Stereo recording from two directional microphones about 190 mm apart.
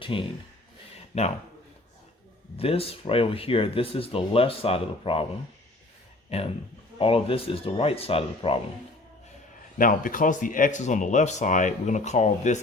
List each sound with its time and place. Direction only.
0.0 s speech: 25° left (ahead or behind)
2.6 s speech: 30° left (ahead or behind)
6.3 s speech: 35° left (ahead or behind)
9.7 s speech: 45° left (ahead or behind)